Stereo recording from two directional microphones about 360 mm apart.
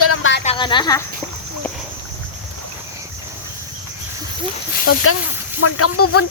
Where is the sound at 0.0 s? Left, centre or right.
Left.